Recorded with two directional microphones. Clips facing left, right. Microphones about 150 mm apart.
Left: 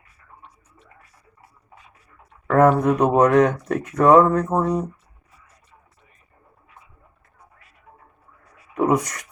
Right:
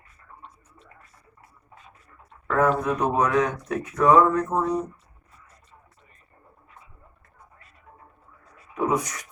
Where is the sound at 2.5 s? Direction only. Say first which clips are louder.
Left 6 dB; 70° left (ahead or behind).